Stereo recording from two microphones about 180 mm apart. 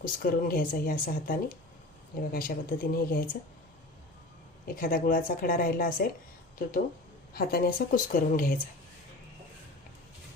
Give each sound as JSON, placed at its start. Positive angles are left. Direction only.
{"t": 0.0, "sound": "a woman's voice", "side_deg": 50}
{"t": 4.6, "sound": "a woman's voice", "side_deg": 55}
{"t": 7.3, "sound": "a woman's voice", "side_deg": 55}